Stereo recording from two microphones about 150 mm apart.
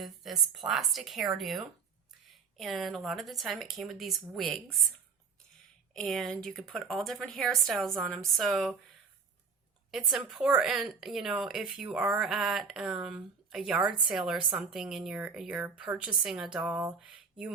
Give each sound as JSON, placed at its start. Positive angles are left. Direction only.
{"t": 0.0, "sound": "a woman's voice", "side_deg": 0}
{"t": 5.9, "sound": "a woman's voice", "side_deg": 5}
{"t": 9.9, "sound": "a woman's voice", "side_deg": -5}